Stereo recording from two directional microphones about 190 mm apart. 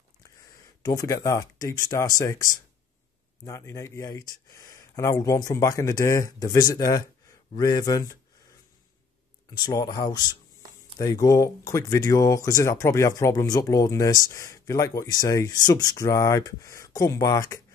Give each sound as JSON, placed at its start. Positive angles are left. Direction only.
{"t": 0.8, "sound": "speech", "side_deg": 20}
{"t": 3.4, "sound": "speech", "side_deg": 15}
{"t": 9.5, "sound": "speech", "side_deg": 20}